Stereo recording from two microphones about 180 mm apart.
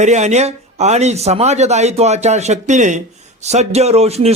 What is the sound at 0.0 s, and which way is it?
Speech, 40° right (ahead or behind).